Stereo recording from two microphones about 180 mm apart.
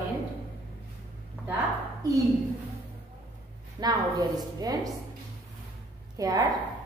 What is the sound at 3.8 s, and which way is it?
A woman's voice, 20° right (ahead or behind).